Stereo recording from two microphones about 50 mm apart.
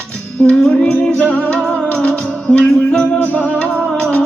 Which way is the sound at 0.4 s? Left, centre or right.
Left.